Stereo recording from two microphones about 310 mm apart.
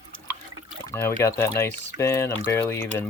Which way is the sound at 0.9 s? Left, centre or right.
Centre.